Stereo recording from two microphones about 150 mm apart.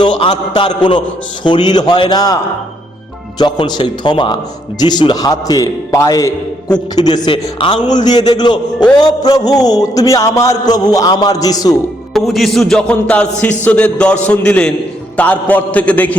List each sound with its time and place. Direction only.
0.2 s a man's voice: 35° left (ahead or behind)
3.3 s a man's voice: 30° left (ahead or behind)
12.1 s music: centre (ahead or behind)
13.7 s a sound: 10° left (ahead or behind)